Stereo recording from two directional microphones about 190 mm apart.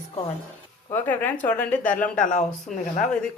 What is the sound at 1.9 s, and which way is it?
Speech, 45° left (ahead or behind).